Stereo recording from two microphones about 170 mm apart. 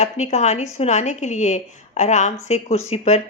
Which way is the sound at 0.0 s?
40° left (ahead or behind).